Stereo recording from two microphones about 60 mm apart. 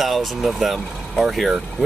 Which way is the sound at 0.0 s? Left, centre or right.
Centre.